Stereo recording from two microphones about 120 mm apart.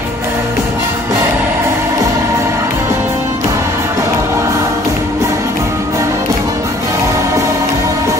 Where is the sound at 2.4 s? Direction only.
25° right (ahead or behind).